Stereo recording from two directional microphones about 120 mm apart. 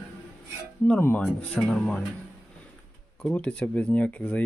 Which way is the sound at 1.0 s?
15° left (ahead or behind).